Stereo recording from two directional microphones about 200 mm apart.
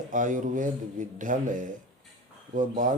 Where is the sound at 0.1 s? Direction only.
40° right (ahead or behind).